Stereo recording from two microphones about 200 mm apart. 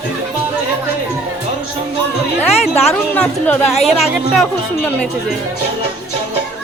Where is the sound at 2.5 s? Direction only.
30° left (ahead or behind).